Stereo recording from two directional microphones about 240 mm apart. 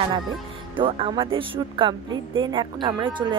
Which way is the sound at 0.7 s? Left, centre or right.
Right.